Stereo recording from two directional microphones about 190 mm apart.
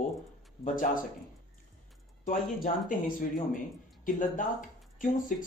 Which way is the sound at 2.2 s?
45° left (ahead or behind).